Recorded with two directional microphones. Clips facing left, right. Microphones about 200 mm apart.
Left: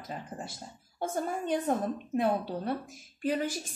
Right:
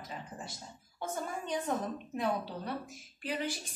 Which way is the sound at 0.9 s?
50° left (ahead or behind).